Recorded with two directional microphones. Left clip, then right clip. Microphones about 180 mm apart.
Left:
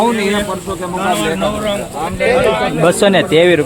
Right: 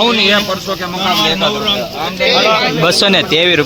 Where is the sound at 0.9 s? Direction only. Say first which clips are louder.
Right 2 dB; 20° right (ahead or behind).